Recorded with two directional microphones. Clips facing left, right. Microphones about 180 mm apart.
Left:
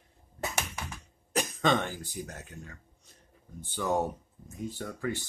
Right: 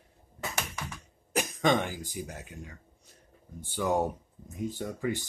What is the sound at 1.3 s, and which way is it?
Speech, 10° right (ahead or behind).